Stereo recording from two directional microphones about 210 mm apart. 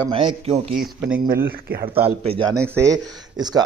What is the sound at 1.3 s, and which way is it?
Speech, 45° right (ahead or behind).